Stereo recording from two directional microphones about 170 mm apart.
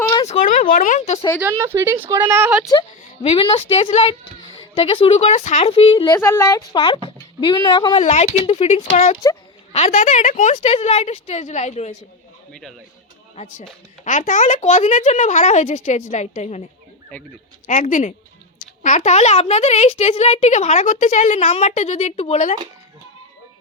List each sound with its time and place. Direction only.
0.3 s a sound: 45° left (ahead or behind)
0.7 s speech: 50° left (ahead or behind)
1.4 s speech: 15° right (ahead or behind)
3.2 s a child's voice: 35° left (ahead or behind)
6.1 s speech: 15° left (ahead or behind)
6.7 s speech: 30° left (ahead or behind)
8.0 s a child's voice: 45° left (ahead or behind)
13.3 s a child's voice: 40° left (ahead or behind)
17.7 s a child's voice: 50° left (ahead or behind)